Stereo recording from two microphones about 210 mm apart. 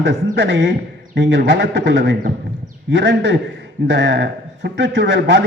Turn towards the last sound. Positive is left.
turn(degrees=-55)  # may be behind; listen again after turning